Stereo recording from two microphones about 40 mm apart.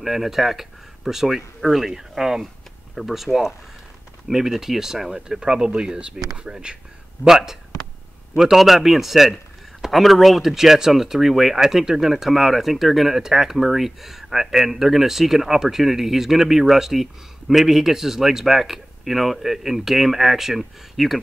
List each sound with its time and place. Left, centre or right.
0.0 s speech: centre; by 6.8 s right
7.2 s speech: centre